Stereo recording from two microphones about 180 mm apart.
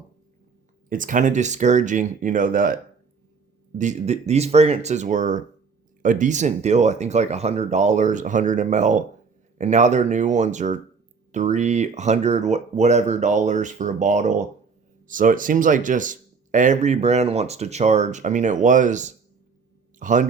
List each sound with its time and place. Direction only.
0.9 s speech: 50° right (ahead or behind)
3.8 s a man's voice: 40° right (ahead or behind)